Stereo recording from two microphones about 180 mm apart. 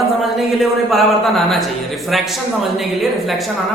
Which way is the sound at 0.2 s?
Centre (ahead or behind).